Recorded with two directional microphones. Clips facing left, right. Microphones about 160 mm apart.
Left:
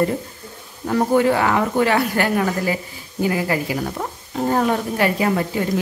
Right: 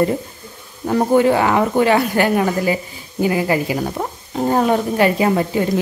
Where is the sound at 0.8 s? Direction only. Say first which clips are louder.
Right 3 dB; 20° right (ahead or behind).